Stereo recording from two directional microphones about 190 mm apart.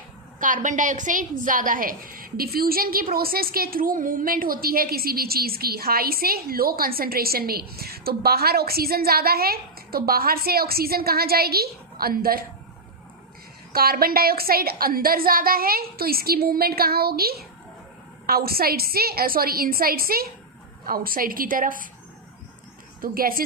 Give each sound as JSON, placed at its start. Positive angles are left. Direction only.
{"t": 0.3, "sound": "a woman's voice", "side_deg": -45}
{"t": 13.7, "sound": "a woman's voice", "side_deg": -50}
{"t": 23.0, "sound": "a woman's voice", "side_deg": -50}